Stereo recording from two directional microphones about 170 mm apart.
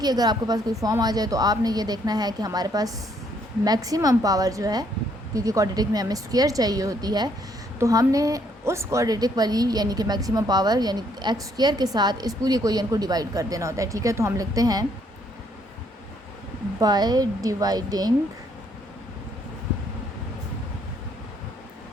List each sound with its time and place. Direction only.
0.0 s a woman's voice: 25° right (ahead or behind)
16.8 s a woman's voice: 25° right (ahead or behind)